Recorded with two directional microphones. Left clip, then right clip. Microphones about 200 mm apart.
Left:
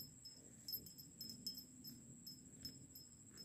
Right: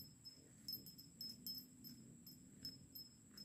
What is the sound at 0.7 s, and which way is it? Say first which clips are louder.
Music: right 1 dB; 10° right (ahead or behind).